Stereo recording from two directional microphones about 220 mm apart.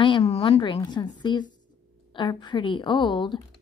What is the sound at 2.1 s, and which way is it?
A woman's voice, 20° left (ahead or behind).